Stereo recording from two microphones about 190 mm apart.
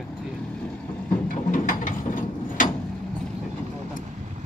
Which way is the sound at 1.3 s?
45° left (ahead or behind).